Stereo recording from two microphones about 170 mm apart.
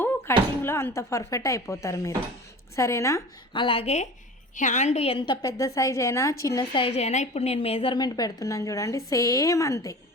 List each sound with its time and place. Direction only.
0.0 s a woman's voice: 15° left (ahead or behind)
3.5 s a woman's voice: 30° left (ahead or behind)